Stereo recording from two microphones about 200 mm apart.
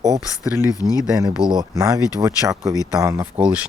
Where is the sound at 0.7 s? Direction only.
15° left (ahead or behind).